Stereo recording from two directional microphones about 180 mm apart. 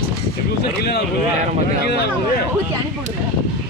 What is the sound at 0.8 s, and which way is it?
Speech, 65° left (ahead or behind).